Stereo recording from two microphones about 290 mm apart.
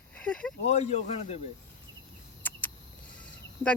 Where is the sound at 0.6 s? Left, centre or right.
Left.